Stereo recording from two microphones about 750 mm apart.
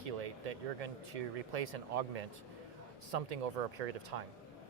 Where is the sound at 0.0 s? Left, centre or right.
Right.